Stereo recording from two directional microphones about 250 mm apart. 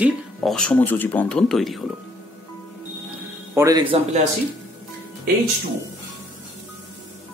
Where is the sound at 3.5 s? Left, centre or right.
Centre.